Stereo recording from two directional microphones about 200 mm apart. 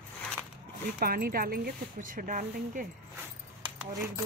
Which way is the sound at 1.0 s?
45° right (ahead or behind).